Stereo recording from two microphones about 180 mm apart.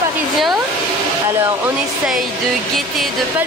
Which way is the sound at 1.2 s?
15° right (ahead or behind).